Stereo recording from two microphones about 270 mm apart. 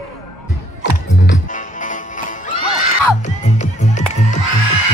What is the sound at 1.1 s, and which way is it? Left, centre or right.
Music, left.